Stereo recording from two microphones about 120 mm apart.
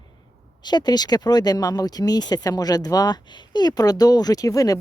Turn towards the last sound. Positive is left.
turn(degrees=30)  # may be behind; listen again after turning